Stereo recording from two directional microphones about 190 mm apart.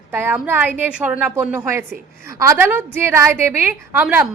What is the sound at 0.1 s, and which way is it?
A woman's voice, 10° right (ahead or behind).